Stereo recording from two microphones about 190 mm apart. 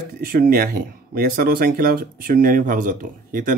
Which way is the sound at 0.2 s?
50° right (ahead or behind).